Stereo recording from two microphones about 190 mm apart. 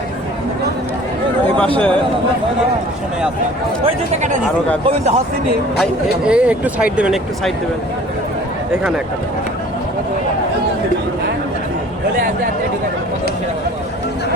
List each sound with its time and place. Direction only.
1.5 s a man's voice: 10° left (ahead or behind)
4.9 s speech: 35° right (ahead or behind)
5.8 s speech: 5° right (ahead or behind)
12.1 s speech: 45° right (ahead or behind)